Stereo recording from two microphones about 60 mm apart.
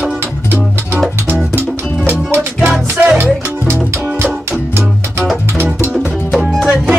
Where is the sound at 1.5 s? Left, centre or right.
Right.